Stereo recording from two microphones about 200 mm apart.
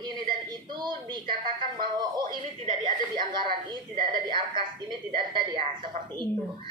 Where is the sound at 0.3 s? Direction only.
20° right (ahead or behind).